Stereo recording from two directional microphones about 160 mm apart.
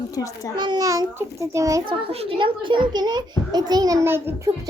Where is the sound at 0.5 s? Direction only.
25° right (ahead or behind).